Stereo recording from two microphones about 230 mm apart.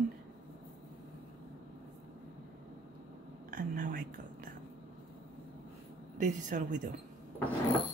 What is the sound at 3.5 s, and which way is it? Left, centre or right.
Speech, right.